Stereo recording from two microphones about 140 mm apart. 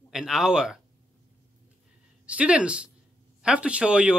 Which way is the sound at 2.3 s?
10° right (ahead or behind).